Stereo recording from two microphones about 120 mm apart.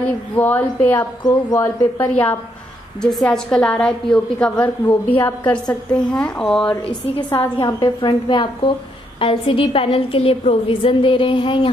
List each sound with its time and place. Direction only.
0.0 s a woman's voice: 15° left (ahead or behind)
1.2 s a woman's voice: 25° left (ahead or behind)
3.0 s a woman's voice: 5° left (ahead or behind)
7.5 s a woman's voice: 40° left (ahead or behind)